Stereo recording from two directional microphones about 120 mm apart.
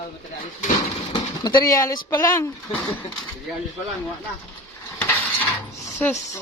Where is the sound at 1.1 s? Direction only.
35° left (ahead or behind).